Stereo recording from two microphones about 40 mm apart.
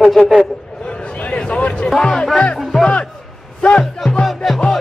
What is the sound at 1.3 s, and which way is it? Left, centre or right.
Speech, left.